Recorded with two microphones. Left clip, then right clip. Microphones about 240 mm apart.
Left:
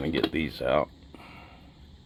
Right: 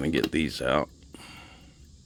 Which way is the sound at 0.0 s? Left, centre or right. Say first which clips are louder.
Right 1 dB; right.